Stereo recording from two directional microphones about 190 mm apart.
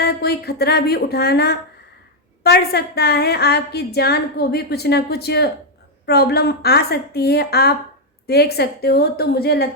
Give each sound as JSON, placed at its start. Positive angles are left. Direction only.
{"t": 0.0, "sound": "a woman's voice", "side_deg": 55}